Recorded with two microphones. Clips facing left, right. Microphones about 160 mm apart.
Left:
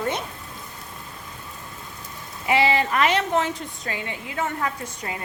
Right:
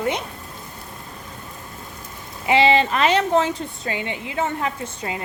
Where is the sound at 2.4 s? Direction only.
25° right (ahead or behind).